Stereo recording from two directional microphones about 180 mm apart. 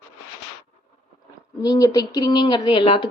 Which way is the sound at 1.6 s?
20° left (ahead or behind).